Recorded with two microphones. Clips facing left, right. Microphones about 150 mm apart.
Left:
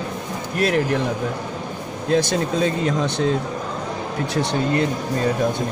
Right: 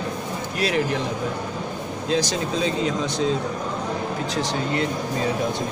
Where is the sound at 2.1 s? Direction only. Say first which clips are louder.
Left 4 dB; 55° left (ahead or behind).